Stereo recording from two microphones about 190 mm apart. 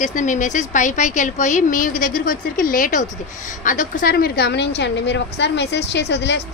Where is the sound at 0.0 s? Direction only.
40° left (ahead or behind).